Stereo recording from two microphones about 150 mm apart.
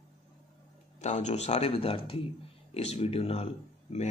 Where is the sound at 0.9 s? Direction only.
50° left (ahead or behind).